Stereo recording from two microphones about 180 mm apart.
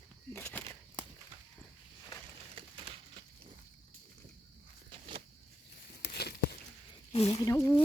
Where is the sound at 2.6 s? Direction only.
30° right (ahead or behind).